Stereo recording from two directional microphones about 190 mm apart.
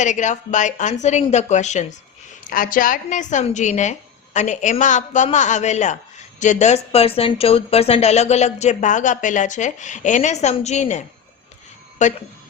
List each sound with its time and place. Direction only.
0.0 s a woman's voice: 40° left (ahead or behind)